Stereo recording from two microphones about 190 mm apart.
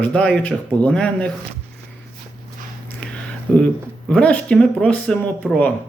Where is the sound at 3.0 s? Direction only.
5° left (ahead or behind).